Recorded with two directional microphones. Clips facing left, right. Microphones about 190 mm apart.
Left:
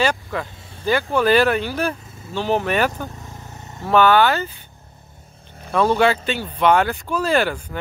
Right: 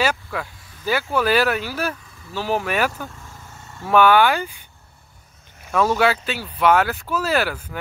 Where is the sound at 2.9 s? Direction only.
20° left (ahead or behind).